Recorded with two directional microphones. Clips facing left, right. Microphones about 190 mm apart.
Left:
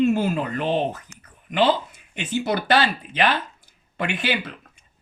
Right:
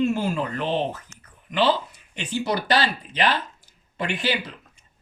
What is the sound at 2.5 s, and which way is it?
Speech, 55° left (ahead or behind).